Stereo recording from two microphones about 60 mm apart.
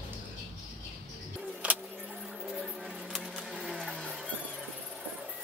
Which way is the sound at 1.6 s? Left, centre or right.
Right.